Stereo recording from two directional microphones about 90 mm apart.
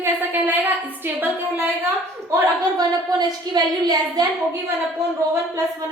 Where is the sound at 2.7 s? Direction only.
50° right (ahead or behind).